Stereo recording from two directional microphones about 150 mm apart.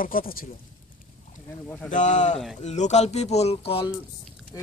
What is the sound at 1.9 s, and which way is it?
Speech, 55° left (ahead or behind).